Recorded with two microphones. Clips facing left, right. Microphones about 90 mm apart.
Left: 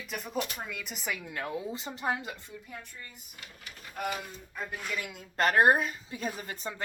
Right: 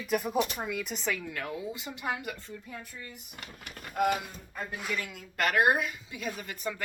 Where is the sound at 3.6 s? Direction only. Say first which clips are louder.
Right 7 dB; 65° right (ahead or behind).